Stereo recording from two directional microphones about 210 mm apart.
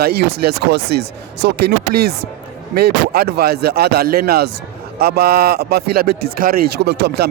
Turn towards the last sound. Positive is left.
turn(degrees=-50)  # may be behind; listen again after turning